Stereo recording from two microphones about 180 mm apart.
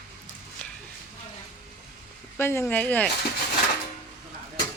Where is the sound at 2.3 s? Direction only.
15° left (ahead or behind).